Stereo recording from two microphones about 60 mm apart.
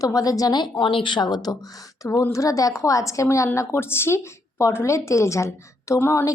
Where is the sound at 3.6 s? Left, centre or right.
Left.